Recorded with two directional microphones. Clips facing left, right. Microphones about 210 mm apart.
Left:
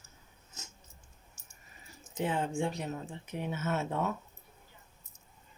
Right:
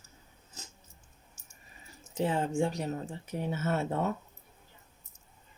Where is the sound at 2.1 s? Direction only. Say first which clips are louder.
Right 3 dB; 35° right (ahead or behind).